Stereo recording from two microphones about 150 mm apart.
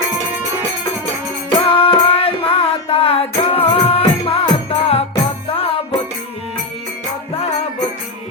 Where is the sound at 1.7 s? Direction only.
35° left (ahead or behind).